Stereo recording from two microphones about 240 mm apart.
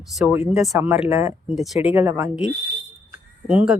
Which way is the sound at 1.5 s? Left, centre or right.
Centre.